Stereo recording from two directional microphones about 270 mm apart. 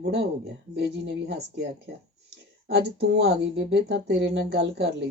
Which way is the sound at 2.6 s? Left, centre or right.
Right.